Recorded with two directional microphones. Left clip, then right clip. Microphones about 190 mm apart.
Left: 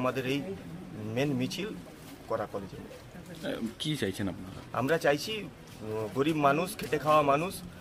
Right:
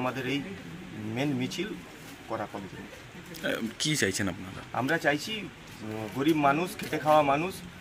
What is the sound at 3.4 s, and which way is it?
Speech, centre (ahead or behind).